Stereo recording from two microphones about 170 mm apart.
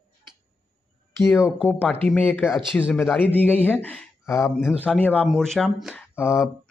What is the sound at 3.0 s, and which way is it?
Speech, 10° left (ahead or behind).